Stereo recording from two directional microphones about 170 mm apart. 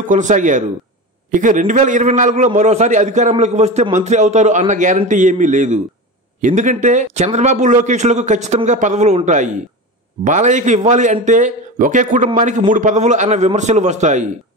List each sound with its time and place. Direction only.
0.0 s a man's voice: 50° right (ahead or behind)